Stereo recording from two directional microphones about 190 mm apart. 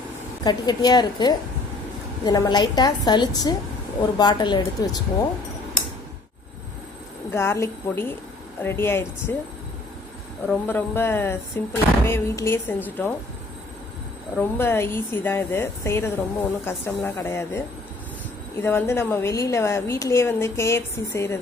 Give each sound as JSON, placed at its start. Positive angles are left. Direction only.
{"t": 0.4, "sound": "a woman's voice", "side_deg": 20}
{"t": 7.3, "sound": "speech", "side_deg": 15}
{"t": 10.5, "sound": "speech", "side_deg": 10}
{"t": 14.3, "sound": "speech", "side_deg": 10}
{"t": 18.6, "sound": "speech", "side_deg": 10}